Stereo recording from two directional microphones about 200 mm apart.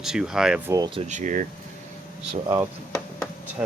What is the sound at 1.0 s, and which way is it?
Speech, 35° right (ahead or behind).